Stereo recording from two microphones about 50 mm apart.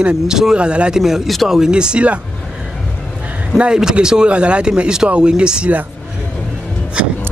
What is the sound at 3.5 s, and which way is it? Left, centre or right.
Speech, centre.